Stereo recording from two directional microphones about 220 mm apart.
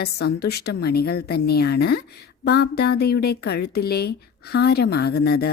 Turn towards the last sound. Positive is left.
turn(degrees=45)  # may be behind; listen again after turning